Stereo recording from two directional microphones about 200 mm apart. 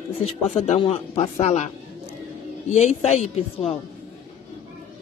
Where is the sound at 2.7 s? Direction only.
35° left (ahead or behind).